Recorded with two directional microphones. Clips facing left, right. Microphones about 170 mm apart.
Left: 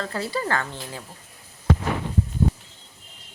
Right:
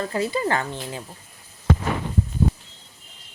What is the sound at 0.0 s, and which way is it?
Speech, 20° right (ahead or behind).